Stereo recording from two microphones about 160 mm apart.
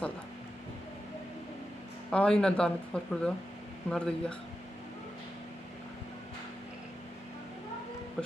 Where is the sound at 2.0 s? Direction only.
5° left (ahead or behind).